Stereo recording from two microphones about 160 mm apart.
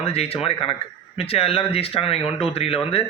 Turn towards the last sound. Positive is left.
turn(degrees=35)  # may be behind; listen again after turning